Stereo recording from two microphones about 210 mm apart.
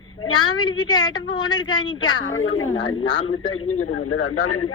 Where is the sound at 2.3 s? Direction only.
75° left (ahead or behind).